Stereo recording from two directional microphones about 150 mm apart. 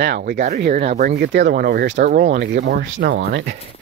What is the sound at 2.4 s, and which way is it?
Speech, 90° right.